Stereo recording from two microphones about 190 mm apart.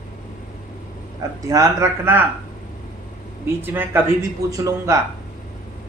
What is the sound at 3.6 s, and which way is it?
A man's voice, 10° right (ahead or behind).